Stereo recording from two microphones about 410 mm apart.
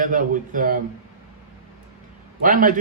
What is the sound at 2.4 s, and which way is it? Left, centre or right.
Speech, centre.